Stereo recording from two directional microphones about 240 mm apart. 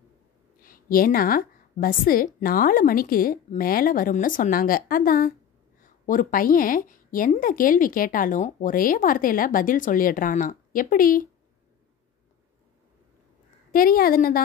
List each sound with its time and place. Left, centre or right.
0.6 s a woman's voice: left
13.7 s a woman's voice: left